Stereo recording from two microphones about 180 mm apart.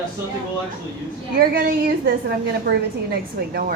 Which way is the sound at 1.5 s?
55° right (ahead or behind).